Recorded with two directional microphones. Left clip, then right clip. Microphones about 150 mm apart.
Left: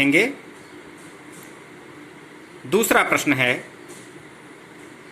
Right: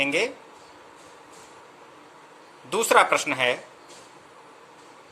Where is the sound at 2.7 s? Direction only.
20° right (ahead or behind).